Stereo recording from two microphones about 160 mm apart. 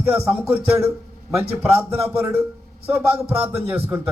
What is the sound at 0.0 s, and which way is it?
Speech, 15° right (ahead or behind).